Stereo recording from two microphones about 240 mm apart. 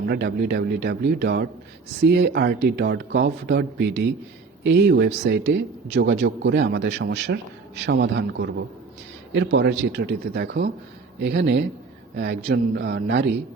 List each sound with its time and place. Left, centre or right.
0.1 s a man's voice: right